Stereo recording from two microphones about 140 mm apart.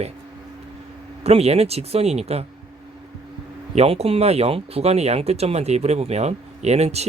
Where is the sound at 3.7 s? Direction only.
45° right (ahead or behind).